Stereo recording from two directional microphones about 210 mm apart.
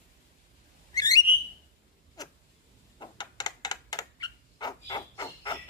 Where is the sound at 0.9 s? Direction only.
20° left (ahead or behind).